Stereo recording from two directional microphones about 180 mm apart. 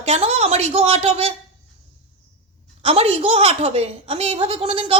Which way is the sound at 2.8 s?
35° right (ahead or behind).